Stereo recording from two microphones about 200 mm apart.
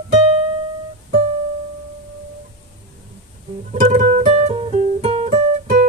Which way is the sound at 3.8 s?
45° right (ahead or behind).